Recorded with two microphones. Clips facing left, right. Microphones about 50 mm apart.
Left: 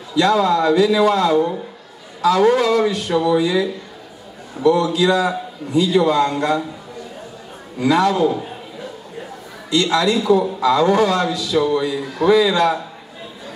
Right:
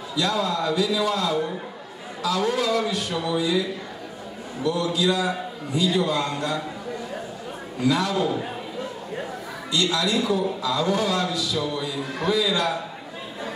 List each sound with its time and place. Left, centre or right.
0.1 s a man's voice: left
3.3 s a man's voice: left
4.6 s a man's voice: left
7.8 s a man's voice: left
9.7 s a man's voice: left